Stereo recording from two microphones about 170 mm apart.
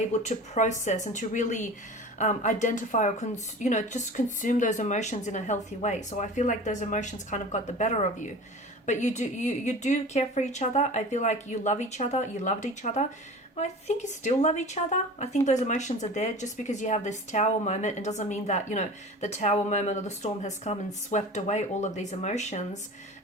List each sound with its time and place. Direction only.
0.1 s speech: 45° left (ahead or behind)